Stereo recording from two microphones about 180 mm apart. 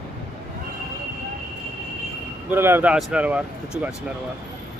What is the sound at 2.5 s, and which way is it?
Speech, 10° right (ahead or behind).